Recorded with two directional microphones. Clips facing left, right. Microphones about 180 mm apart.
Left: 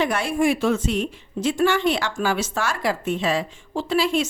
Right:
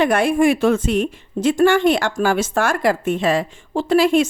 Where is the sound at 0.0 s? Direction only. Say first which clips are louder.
Right 6 dB; 55° right (ahead or behind).